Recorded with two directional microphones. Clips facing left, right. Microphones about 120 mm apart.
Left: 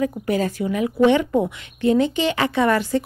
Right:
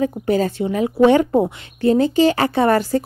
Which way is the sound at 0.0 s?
30° right (ahead or behind).